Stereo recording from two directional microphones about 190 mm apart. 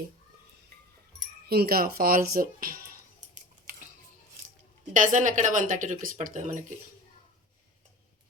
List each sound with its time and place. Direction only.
1.5 s speech: 55° right (ahead or behind)
2.4 s music: 50° right (ahead or behind)
4.9 s speech: 40° right (ahead or behind)